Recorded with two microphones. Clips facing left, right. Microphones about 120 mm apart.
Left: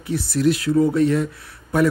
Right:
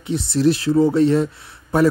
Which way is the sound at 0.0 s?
25° right (ahead or behind).